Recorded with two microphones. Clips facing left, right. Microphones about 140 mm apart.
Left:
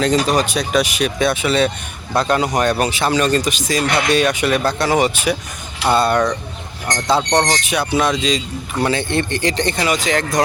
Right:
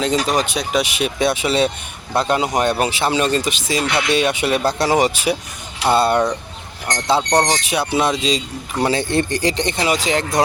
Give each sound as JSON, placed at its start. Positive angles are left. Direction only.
{"t": 0.0, "sound": "speech", "side_deg": -20}
{"t": 2.1, "sound": "speech", "side_deg": -20}
{"t": 3.8, "sound": "speech", "side_deg": 45}
{"t": 4.1, "sound": "speech", "side_deg": -25}
{"t": 7.3, "sound": "speech", "side_deg": -15}
{"t": 7.9, "sound": "speech", "side_deg": -30}